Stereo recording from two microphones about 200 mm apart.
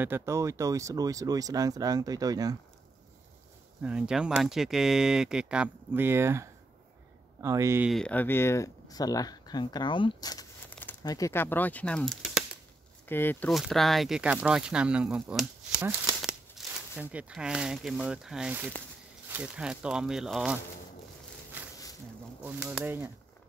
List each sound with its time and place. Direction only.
0.0 s speech: 10° right (ahead or behind)
3.8 s speech: 5° right (ahead or behind)
7.9 s speech: 5° left (ahead or behind)
22.4 s speech: 10° right (ahead or behind)